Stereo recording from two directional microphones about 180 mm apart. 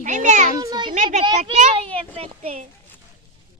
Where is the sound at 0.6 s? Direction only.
20° right (ahead or behind).